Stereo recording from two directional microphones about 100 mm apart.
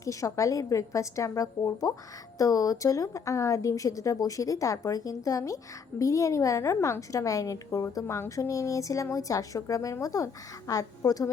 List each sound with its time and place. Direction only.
0.0 s a woman's voice: 30° left (ahead or behind)